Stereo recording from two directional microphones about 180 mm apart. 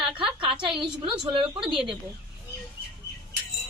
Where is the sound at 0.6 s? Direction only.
5° right (ahead or behind).